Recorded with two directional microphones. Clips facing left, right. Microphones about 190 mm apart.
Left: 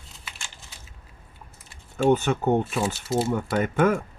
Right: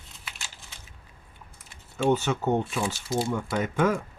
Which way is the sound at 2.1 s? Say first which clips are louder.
Left 3 dB; 55° left (ahead or behind).